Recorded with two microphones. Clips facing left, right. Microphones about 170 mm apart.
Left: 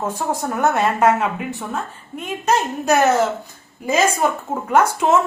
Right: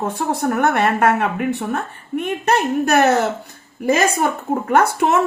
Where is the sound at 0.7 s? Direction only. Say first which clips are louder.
Left 3 dB; 60° right (ahead or behind).